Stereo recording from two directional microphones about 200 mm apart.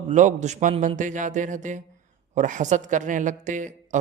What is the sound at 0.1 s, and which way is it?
A woman's voice, 40° right (ahead or behind).